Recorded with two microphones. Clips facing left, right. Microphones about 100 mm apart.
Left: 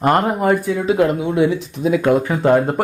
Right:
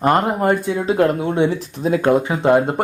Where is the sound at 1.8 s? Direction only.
35° right (ahead or behind).